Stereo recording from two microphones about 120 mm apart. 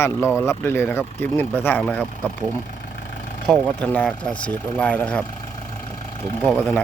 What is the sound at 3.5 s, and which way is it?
Speech, 5° left (ahead or behind).